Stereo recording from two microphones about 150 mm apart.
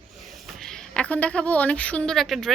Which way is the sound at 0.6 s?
5° left (ahead or behind).